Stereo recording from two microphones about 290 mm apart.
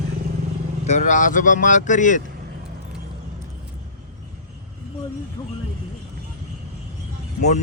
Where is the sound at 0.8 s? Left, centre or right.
Left.